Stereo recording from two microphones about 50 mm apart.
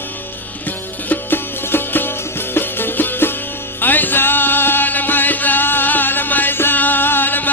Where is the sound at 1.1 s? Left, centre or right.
Left.